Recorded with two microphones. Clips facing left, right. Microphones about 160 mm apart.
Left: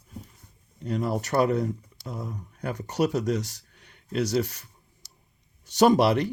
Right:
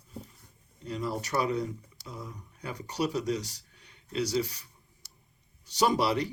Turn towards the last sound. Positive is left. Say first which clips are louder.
# left 7 dB
turn(degrees=50)  # may be behind; listen again after turning